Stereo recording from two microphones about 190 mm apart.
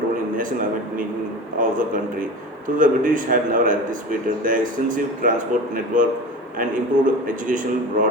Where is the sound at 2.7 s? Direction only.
45° right (ahead or behind).